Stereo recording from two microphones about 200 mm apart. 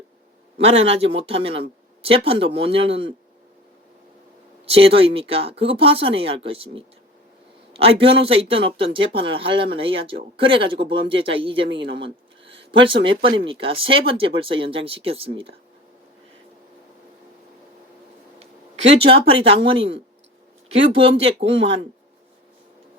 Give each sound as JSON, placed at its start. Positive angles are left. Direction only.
{"t": 0.6, "sound": "speech", "side_deg": -30}
{"t": 4.7, "sound": "speech", "side_deg": -30}
{"t": 12.0, "sound": "a sound", "side_deg": -25}
{"t": 13.4, "sound": "speech", "side_deg": -25}
{"t": 18.9, "sound": "speech", "side_deg": -30}